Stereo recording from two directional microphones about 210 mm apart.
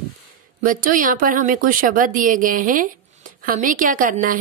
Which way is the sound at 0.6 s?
40° right (ahead or behind).